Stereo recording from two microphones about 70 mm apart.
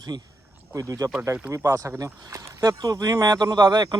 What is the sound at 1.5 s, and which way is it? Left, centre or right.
Speech, right.